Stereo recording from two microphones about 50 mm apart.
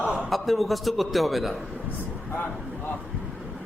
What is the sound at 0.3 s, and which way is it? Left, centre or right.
A man's voice, centre.